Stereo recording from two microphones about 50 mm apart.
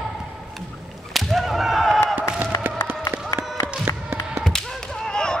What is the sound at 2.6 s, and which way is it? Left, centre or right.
Run, right.